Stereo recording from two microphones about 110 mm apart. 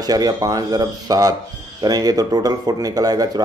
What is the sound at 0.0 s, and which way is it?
Speech, 35° right (ahead or behind).